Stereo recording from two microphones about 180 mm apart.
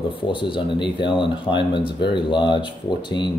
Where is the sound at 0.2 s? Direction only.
30° left (ahead or behind).